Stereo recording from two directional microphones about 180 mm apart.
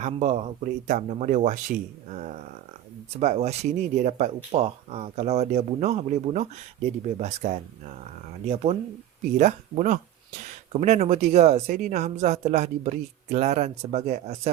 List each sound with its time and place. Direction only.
0.0 s speech: 40° right (ahead or behind)